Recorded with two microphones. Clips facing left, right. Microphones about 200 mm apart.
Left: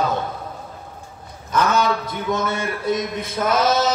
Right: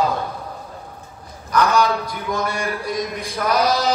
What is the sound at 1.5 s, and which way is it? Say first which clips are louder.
A man's voice: right 1 dB; 25° left (ahead or behind).